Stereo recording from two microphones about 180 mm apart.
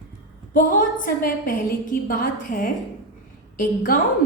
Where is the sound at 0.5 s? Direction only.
50° left (ahead or behind).